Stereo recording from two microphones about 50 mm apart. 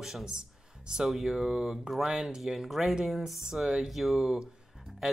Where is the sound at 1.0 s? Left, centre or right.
Centre.